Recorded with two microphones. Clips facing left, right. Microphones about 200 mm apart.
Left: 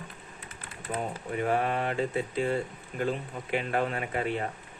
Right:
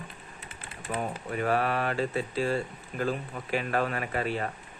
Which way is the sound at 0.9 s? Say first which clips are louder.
Even; 25° left (ahead or behind).